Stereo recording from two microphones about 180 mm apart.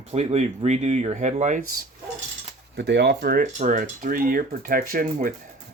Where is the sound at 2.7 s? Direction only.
75° right (ahead or behind).